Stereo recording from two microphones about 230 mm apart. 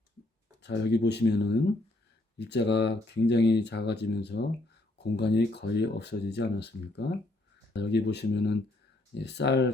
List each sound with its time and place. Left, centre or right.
0.6 s speech: left